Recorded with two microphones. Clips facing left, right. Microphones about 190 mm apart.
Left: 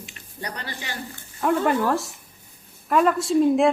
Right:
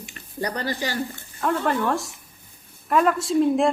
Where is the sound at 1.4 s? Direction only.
5° left (ahead or behind).